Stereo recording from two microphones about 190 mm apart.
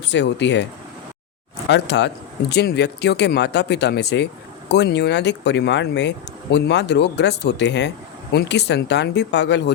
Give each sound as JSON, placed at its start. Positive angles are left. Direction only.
{"t": 0.1, "sound": "speech", "side_deg": 70}
{"t": 1.7, "sound": "speech", "side_deg": 65}